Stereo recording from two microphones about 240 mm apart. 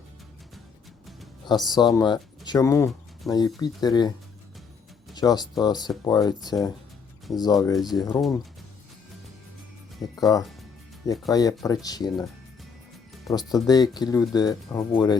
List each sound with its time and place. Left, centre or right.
1.5 s speech: centre
5.1 s speech: centre
10.2 s speech: centre
13.3 s speech: centre